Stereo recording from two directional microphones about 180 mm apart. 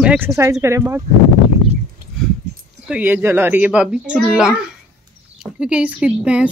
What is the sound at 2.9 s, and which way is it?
A woman's voice, 10° right (ahead or behind).